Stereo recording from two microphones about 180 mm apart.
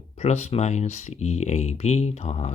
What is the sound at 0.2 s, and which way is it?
Speech, 40° left (ahead or behind).